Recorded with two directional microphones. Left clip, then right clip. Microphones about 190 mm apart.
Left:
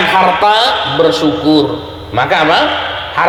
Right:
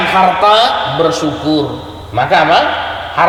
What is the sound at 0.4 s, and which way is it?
A man's voice, 15° left (ahead or behind).